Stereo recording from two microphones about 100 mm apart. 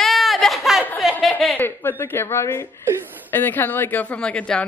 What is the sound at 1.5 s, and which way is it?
A woman's voice, 20° left (ahead or behind).